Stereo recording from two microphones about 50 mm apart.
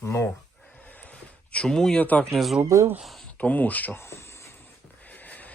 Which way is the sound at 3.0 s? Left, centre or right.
Centre.